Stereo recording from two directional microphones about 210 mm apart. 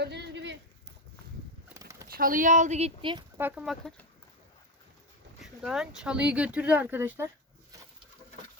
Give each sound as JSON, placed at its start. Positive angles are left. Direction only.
{"t": 0.0, "sound": "a sound", "side_deg": -55}
{"t": 1.7, "sound": "pigeon", "side_deg": -15}
{"t": 2.1, "sound": "speech", "side_deg": -40}
{"t": 3.3, "sound": "speech", "side_deg": -5}
{"t": 5.4, "sound": "speech", "side_deg": 0}